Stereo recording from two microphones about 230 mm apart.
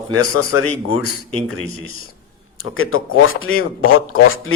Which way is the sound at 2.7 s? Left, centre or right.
Left.